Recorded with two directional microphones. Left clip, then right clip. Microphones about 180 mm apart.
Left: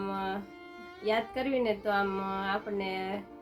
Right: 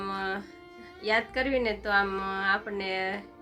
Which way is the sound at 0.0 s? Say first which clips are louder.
Right 2 dB; 10° left (ahead or behind).